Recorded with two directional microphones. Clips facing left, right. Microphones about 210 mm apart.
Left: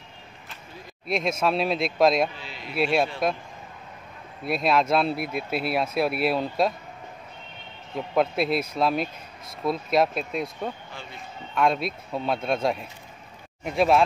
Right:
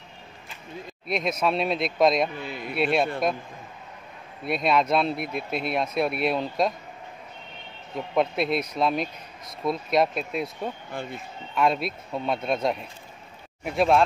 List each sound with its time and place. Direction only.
1.0 s speech: centre (ahead or behind)
2.3 s a sound: 55° right (ahead or behind)
2.7 s speech: centre (ahead or behind)
4.5 s speech: centre (ahead or behind)
7.9 s speech: centre (ahead or behind)
10.9 s speech: 55° right (ahead or behind)
11.5 s speech: centre (ahead or behind)